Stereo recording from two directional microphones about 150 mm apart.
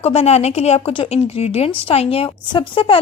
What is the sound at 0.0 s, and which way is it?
A woman's voice, 45° left (ahead or behind).